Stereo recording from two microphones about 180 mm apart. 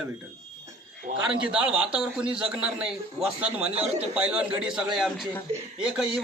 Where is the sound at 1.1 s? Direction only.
40° right (ahead or behind).